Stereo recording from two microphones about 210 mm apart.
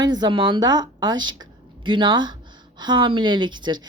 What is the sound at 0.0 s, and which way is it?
A woman's voice, 20° right (ahead or behind).